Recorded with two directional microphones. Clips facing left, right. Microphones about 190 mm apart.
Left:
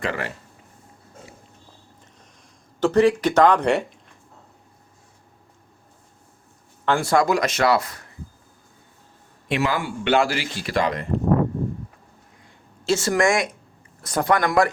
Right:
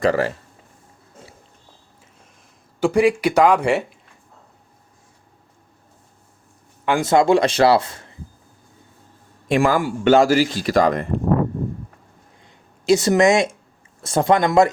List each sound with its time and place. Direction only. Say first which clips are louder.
0.0 s speech: right 9 dB; 40° right (ahead or behind)
2.8 s speech: right 1 dB; 10° right (ahead or behind)
6.8 s speech: right 3 dB; 20° right (ahead or behind)
9.5 s a man's voice: right 6 dB; 45° right (ahead or behind)
12.8 s speech: right 5 dB; 15° right (ahead or behind)